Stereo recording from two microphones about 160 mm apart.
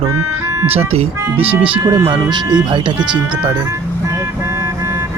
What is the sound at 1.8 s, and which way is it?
Speech, 20° right (ahead or behind).